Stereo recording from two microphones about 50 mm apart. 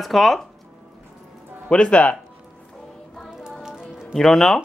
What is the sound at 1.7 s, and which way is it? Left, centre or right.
Speech, left.